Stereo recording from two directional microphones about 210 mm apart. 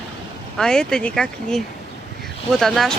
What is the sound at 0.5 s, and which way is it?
Speech, 5° left (ahead or behind).